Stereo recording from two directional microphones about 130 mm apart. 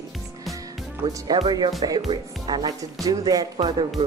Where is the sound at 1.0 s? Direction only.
30° right (ahead or behind).